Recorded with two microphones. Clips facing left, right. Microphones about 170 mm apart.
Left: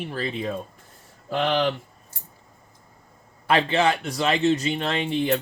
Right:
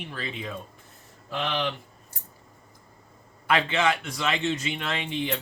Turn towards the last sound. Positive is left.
turn(degrees=40)  # may be behind; listen again after turning